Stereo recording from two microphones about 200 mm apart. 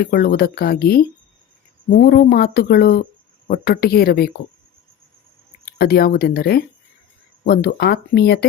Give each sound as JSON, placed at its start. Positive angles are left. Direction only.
{"t": 0.0, "sound": "speech", "side_deg": 50}
{"t": 5.7, "sound": "speech", "side_deg": 50}